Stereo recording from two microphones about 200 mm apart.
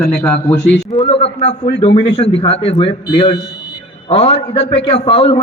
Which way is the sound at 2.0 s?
60° left (ahead or behind).